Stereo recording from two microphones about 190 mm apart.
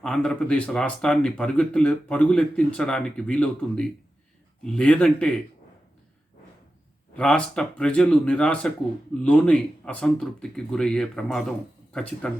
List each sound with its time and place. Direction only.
0.0 s speech: 5° left (ahead or behind)
7.2 s speech: 5° left (ahead or behind)